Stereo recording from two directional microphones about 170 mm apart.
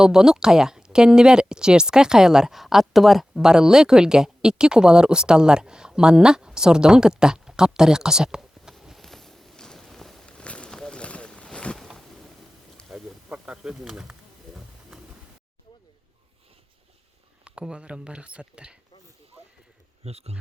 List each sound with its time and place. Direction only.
0.0 s speech: 5° right (ahead or behind)
12.7 s snake: 5° right (ahead or behind)
17.4 s speech: 5° right (ahead or behind)
20.1 s speech: 40° right (ahead or behind)